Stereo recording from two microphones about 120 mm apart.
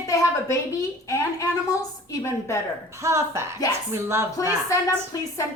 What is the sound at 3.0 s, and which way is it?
Speech, 25° right (ahead or behind).